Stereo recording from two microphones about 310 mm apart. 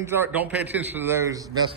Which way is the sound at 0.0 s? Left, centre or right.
Centre.